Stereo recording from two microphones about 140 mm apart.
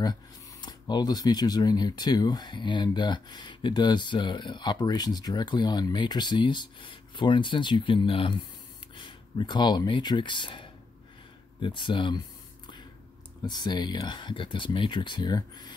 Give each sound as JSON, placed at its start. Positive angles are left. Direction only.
{"t": 0.0, "sound": "speech", "side_deg": 30}
{"t": 13.5, "sound": "speech", "side_deg": 30}